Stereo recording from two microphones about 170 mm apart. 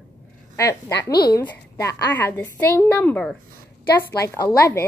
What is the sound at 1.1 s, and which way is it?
Speech, 70° left (ahead or behind).